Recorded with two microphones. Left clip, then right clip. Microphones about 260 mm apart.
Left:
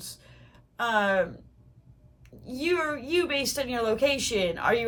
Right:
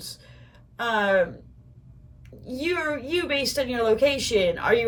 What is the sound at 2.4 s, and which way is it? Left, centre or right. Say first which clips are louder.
A woman's voice: right 1 dB; centre.